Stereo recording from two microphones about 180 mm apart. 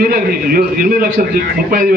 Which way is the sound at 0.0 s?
55° right (ahead or behind).